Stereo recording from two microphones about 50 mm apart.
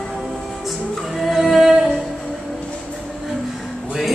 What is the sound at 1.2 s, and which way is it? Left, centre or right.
Music, centre.